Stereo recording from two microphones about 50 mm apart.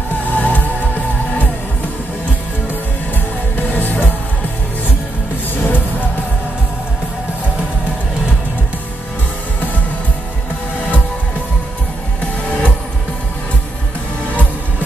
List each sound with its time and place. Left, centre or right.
0.3 s music: left
3.5 s music: left
5.6 s music: left
12.4 s music: left